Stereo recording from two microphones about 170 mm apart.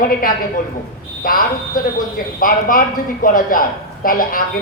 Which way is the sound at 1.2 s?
55° left (ahead or behind).